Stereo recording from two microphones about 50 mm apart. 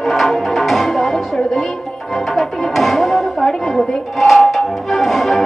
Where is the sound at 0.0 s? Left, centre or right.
Centre.